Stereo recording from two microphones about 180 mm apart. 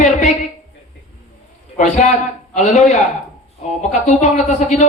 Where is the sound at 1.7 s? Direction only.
40° left (ahead or behind).